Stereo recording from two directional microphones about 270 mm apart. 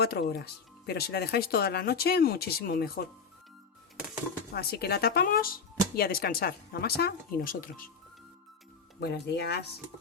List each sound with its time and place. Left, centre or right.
0.0 s speech: left
4.5 s speech: left
9.0 s speech: left